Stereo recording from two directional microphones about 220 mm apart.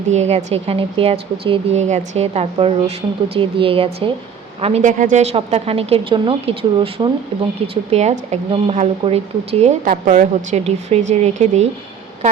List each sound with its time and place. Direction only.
0.1 s speech: 30° right (ahead or behind)